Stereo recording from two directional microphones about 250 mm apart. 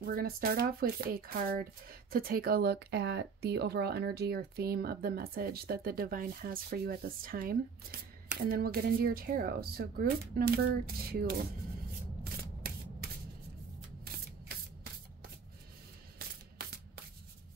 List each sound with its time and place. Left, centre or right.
0.0 s speech: right
12.2 s sanding: right